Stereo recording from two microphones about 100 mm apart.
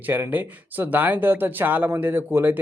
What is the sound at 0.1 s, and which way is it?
Speech, 20° right (ahead or behind).